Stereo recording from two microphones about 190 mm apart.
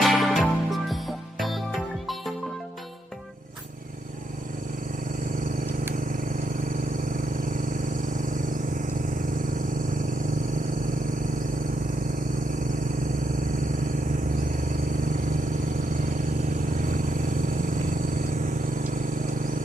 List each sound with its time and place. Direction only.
0.0 s music: centre (ahead or behind)
5.9 s vehicle: 45° right (ahead or behind)
14.5 s vehicle: 45° right (ahead or behind)